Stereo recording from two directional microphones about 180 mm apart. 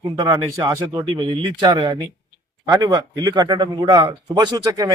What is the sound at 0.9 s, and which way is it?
Speech, 30° right (ahead or behind).